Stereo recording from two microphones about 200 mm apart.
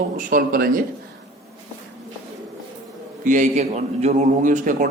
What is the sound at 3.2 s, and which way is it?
A man's voice, 40° right (ahead or behind).